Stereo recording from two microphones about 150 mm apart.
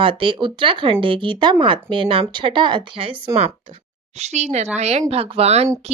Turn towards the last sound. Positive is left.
turn(degrees=-45)  # may be behind; listen again after turning